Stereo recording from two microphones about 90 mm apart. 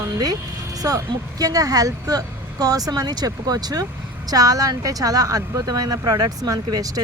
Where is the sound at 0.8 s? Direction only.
45° right (ahead or behind).